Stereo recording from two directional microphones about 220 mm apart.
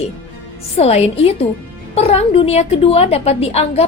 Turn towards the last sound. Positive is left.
turn(degrees=25)  # may be behind; listen again after turning